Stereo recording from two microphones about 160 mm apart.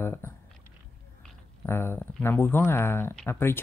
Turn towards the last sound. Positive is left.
turn(degrees=15)  # may be behind; listen again after turning